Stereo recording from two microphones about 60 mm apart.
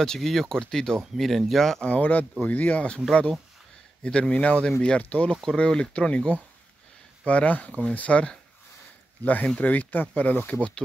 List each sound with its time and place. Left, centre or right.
0.0 s speech: centre
1.9 s speech: left
3.1 s speech: centre
5.3 s speech: centre; by 10.6 s left